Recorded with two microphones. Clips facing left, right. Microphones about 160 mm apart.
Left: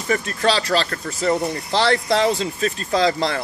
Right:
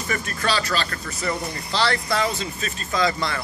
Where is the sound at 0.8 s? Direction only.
45° left (ahead or behind).